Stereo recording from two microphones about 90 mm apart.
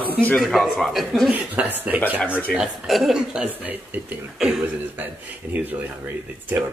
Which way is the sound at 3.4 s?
20° right (ahead or behind).